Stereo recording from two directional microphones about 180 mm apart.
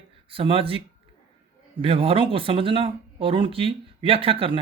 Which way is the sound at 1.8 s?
30° right (ahead or behind).